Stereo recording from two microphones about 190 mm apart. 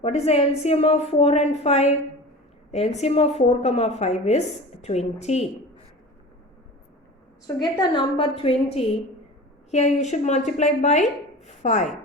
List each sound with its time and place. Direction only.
0.0 s a woman's voice: 30° left (ahead or behind)
7.4 s a woman's voice: 20° left (ahead or behind)